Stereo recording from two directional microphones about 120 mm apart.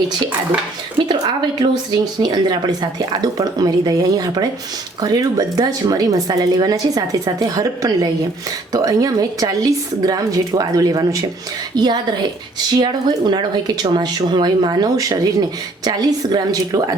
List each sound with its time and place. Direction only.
2.2 s a woman's voice: 35° right (ahead or behind)